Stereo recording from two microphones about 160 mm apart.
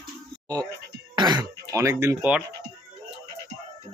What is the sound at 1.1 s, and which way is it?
Throat clearing, 25° right (ahead or behind).